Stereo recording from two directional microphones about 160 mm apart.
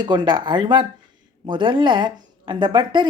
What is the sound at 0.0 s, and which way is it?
Speech, 30° right (ahead or behind).